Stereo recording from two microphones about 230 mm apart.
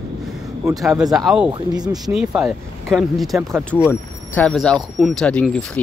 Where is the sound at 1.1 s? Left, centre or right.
Centre.